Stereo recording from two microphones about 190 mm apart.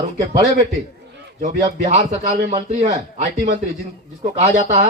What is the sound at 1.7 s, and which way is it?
Speech, 35° right (ahead or behind).